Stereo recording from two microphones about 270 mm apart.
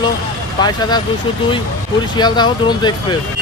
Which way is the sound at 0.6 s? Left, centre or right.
Centre.